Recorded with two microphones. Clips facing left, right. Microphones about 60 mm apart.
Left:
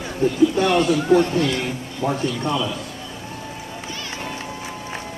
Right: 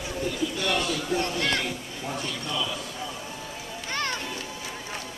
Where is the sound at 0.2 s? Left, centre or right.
Left.